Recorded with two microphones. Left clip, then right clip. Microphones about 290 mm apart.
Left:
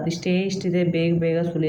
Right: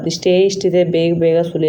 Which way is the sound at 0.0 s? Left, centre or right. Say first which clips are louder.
Right 12 dB; centre.